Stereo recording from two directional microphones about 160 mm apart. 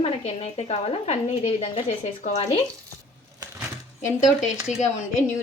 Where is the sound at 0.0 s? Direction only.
40° left (ahead or behind).